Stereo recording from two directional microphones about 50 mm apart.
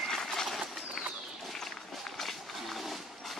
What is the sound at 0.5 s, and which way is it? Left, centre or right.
Bird, centre.